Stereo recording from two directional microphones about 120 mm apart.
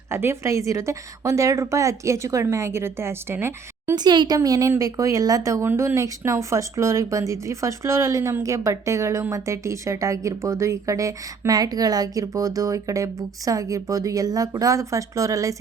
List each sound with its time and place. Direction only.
0.1 s speech: 20° right (ahead or behind)
3.9 s speech: 35° right (ahead or behind)